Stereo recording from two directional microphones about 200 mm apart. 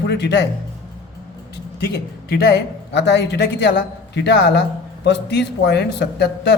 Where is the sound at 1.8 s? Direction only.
50° left (ahead or behind).